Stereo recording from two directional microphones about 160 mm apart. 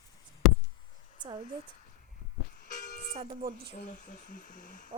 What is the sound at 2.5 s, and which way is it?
Train, 55° left (ahead or behind).